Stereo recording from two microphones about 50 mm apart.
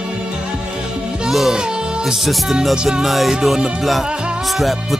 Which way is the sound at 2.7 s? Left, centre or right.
Centre.